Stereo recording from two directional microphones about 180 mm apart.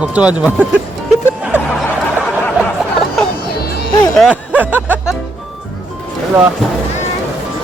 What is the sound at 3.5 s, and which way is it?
Music, 60° left (ahead or behind).